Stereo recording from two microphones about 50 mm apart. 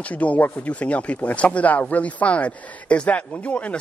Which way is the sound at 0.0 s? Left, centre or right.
Left.